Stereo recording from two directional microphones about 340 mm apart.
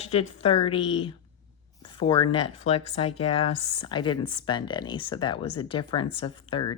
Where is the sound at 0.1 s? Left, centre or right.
Centre.